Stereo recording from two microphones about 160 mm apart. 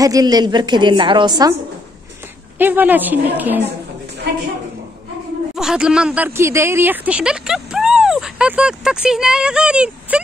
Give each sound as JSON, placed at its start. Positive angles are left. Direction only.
{"t": 0.0, "sound": "a woman's voice", "side_deg": -25}
{"t": 2.6, "sound": "a woman's voice", "side_deg": -10}
{"t": 5.6, "sound": "a woman's voice", "side_deg": -5}